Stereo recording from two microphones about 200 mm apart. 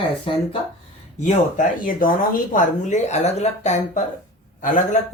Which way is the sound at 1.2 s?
40° left (ahead or behind).